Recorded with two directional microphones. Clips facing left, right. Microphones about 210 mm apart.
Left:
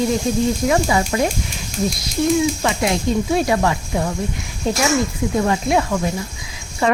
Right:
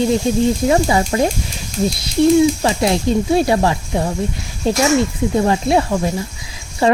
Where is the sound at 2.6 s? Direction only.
30° right (ahead or behind).